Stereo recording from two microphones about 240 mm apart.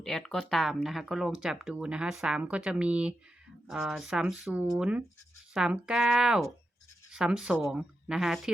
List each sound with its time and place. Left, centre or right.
0.0 s speech: centre